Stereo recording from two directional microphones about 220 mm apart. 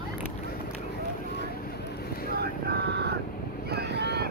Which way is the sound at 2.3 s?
45° right (ahead or behind).